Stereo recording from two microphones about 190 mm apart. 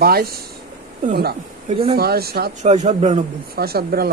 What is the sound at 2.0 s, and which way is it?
Speech, 55° right (ahead or behind).